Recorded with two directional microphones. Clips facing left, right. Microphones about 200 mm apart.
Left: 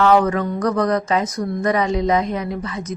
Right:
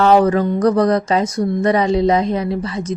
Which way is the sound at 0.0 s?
35° right (ahead or behind).